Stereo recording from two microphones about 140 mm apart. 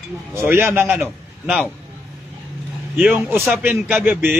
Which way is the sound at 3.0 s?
10° right (ahead or behind).